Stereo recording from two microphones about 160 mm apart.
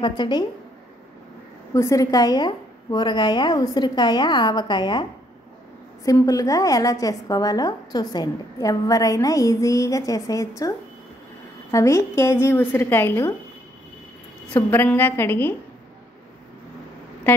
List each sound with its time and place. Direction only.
0.0 s a woman's voice: 30° left (ahead or behind)
1.7 s a woman's voice: 20° left (ahead or behind)
6.0 s a woman's voice: 20° left (ahead or behind)
11.7 s a woman's voice: 20° left (ahead or behind)
14.5 s a woman's voice: 10° left (ahead or behind)